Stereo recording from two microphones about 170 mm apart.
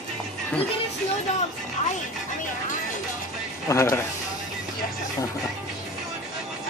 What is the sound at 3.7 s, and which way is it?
Speech, 20° left (ahead or behind).